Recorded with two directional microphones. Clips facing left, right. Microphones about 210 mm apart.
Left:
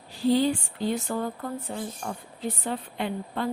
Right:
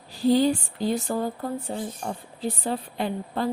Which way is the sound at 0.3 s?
40° right (ahead or behind).